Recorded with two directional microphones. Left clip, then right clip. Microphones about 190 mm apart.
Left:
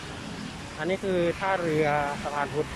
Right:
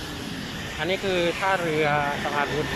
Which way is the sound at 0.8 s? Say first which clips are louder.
Right 2 dB; 5° left (ahead or behind).